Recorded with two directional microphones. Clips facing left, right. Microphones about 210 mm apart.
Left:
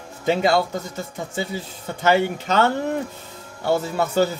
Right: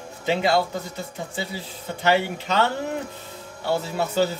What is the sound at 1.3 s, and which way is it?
A child's voice, 45° left (ahead or behind).